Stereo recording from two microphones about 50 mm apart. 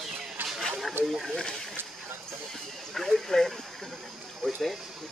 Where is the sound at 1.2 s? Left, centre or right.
Centre.